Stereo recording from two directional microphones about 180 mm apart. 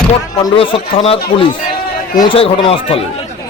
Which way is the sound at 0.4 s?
30° left (ahead or behind).